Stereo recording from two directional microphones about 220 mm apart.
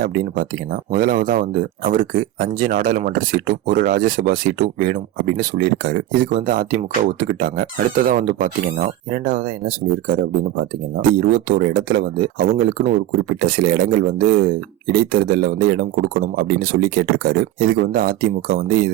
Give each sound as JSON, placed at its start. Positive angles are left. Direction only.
{"t": 0.0, "sound": "speech", "side_deg": -40}